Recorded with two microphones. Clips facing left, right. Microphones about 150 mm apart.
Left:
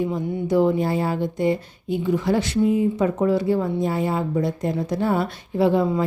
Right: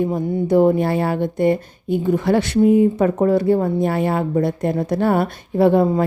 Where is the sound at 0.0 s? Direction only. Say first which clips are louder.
Right 4 dB; 55° right (ahead or behind).